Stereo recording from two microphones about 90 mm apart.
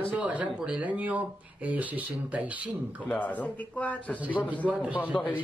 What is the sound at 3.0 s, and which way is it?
Speech, 15° left (ahead or behind).